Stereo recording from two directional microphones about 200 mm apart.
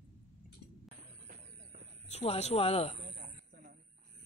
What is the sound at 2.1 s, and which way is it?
Speech, 30° left (ahead or behind).